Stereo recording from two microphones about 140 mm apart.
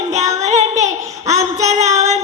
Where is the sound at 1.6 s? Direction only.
55° right (ahead or behind).